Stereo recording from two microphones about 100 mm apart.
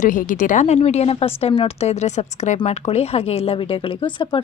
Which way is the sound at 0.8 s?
90° left.